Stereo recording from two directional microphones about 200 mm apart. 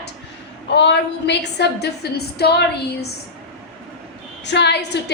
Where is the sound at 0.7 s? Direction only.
60° left (ahead or behind).